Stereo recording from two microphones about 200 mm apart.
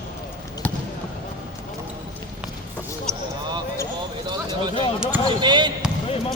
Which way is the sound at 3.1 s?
5° left (ahead or behind).